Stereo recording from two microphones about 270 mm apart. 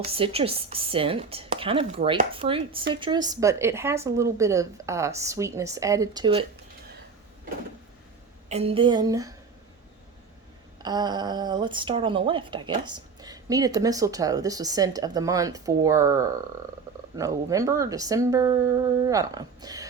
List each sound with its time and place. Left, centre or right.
0.0 s speech: right
8.4 s speech: right
10.8 s speech: centre